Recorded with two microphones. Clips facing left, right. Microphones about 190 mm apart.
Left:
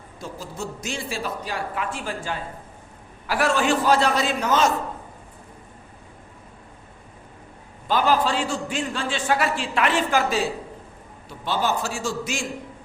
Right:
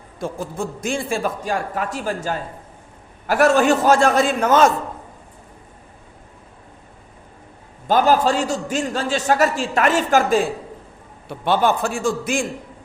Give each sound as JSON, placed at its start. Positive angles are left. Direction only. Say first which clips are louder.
{"t": 0.2, "sound": "a man's voice", "louder": "right 7 dB", "side_deg": -50}
{"t": 7.9, "sound": "a man's voice", "louder": "right 5 dB", "side_deg": -45}